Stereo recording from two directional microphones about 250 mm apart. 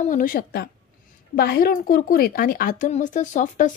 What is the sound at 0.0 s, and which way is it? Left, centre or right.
Speech, left.